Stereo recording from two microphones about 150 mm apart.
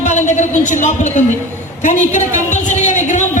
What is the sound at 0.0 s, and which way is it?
A woman's voice, 55° left (ahead or behind).